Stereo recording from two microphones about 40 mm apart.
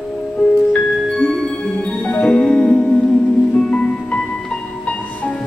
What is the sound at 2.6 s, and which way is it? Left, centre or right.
Music, left.